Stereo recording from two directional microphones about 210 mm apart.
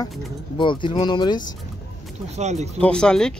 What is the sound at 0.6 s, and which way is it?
Speech, 25° left (ahead or behind).